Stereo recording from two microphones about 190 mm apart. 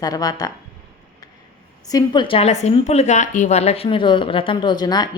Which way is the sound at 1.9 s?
20° left (ahead or behind).